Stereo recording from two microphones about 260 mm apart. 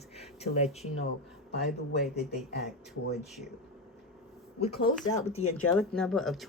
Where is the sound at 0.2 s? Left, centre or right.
Left.